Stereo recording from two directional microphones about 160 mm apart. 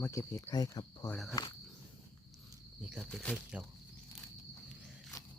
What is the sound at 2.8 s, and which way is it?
Speech, centre (ahead or behind).